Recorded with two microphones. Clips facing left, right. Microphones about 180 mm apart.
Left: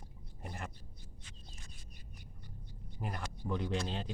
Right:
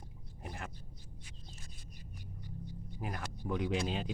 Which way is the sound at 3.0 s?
5° right (ahead or behind).